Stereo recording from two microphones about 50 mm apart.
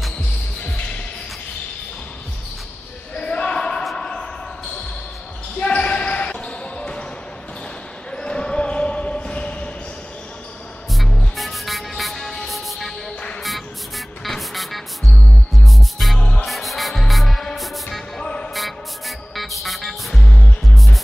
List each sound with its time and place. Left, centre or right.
3.2 s basketball bounce: centre
3.9 s a sound: centre
5.6 s basketball bounce: left
8.1 s basketball bounce: centre
10.9 s music: centre
18.2 s music: left
18.5 s music: centre
20.6 s music: centre